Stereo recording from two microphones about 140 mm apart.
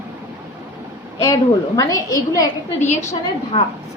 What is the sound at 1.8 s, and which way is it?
A woman's voice, 25° left (ahead or behind).